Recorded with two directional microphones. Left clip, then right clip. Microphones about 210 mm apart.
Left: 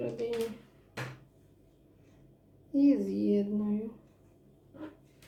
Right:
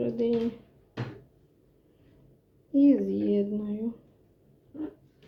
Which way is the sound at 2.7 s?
30° right (ahead or behind).